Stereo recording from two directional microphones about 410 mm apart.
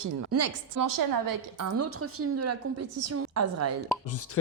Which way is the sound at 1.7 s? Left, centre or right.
Right.